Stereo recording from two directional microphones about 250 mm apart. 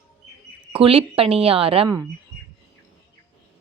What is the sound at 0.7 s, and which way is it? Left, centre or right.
Speech, right.